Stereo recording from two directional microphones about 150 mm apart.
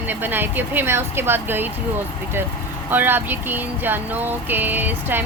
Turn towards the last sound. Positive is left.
turn(degrees=-15)  # may be behind; listen again after turning